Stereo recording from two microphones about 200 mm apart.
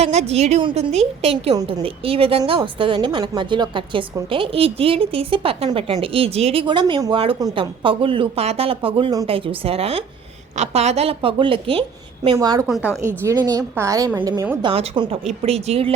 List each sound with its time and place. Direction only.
0.0 s a woman's voice: 30° right (ahead or behind)
12.6 s a woman's voice: centre (ahead or behind)
13.2 s a woman's voice: 20° right (ahead or behind)